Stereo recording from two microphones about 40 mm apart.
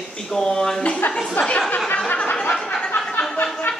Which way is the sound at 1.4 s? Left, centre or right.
Left.